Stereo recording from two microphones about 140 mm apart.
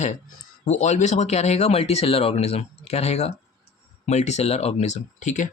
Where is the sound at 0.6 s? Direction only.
55° left (ahead or behind).